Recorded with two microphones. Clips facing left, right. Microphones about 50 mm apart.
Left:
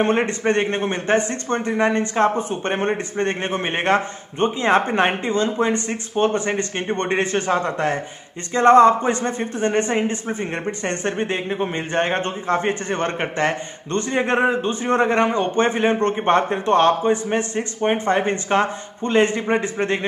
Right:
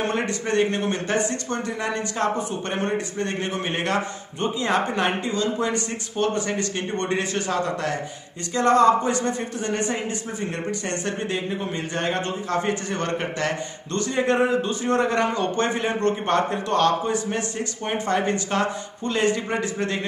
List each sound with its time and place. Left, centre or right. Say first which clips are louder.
0.0 s speech: left 6 dB; left